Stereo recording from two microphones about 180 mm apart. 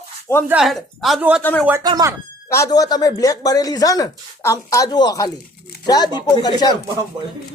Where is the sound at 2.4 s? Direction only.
15° left (ahead or behind).